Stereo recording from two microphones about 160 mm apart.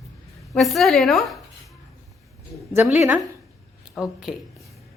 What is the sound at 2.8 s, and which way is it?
Speech, 10° right (ahead or behind).